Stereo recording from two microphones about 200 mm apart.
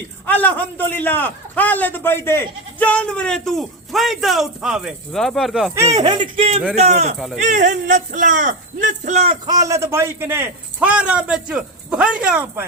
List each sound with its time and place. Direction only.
0.3 s a man's voice: 10° left (ahead or behind)
5.7 s a man's voice: 15° right (ahead or behind)
6.2 s speech: 30° right (ahead or behind)
9.5 s a man's voice: 15° right (ahead or behind)